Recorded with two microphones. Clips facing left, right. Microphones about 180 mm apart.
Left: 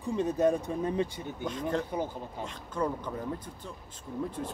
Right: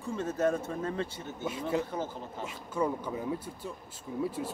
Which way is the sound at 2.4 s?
10° right (ahead or behind).